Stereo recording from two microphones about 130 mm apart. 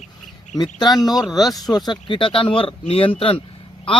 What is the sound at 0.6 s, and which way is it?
A man's voice, 30° left (ahead or behind).